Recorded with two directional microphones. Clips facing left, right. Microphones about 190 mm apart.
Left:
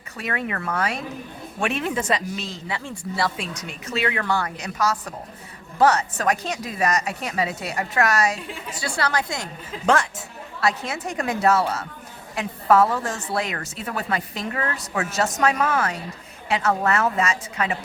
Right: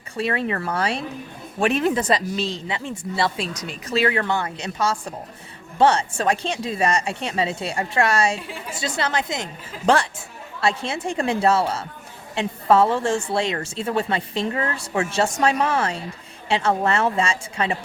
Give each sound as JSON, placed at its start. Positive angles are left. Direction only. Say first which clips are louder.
{"t": 0.2, "sound": "a woman's voice", "louder": "right 5 dB", "side_deg": -30}
{"t": 8.4, "sound": "a woman's voice", "louder": "right 1 dB", "side_deg": 0}
{"t": 8.7, "sound": "a woman's voice", "louder": "right 1 dB", "side_deg": -20}
{"t": 9.8, "sound": "a woman's voice", "louder": "right 2 dB", "side_deg": -35}